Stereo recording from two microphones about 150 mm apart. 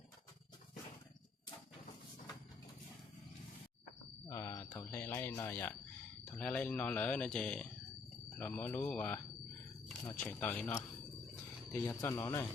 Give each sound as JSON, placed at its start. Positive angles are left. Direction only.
{"t": 4.3, "sound": "speech", "side_deg": 20}